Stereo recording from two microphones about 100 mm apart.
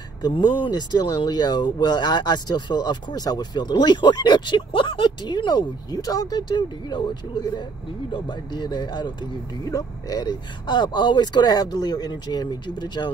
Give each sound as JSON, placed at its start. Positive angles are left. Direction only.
{"t": 0.2, "sound": "speech", "side_deg": 50}